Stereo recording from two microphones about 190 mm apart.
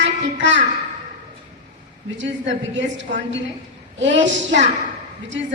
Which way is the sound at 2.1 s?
75° right (ahead or behind).